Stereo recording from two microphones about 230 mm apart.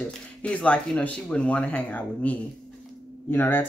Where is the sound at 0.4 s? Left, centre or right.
Centre.